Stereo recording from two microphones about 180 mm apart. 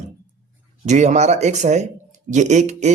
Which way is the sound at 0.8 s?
40° right (ahead or behind).